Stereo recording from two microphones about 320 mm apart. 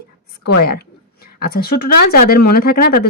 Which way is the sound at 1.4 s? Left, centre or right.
Left.